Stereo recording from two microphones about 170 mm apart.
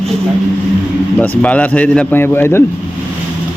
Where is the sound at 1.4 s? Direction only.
10° left (ahead or behind).